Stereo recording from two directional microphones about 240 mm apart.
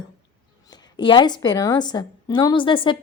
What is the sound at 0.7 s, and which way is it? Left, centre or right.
A woman's voice, centre.